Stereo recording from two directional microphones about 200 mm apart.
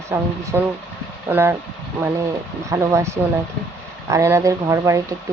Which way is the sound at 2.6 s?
15° right (ahead or behind).